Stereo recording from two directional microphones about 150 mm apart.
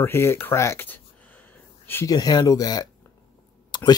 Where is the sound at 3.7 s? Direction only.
25° left (ahead or behind).